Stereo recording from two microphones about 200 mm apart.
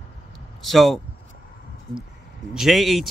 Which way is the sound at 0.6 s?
Centre (ahead or behind).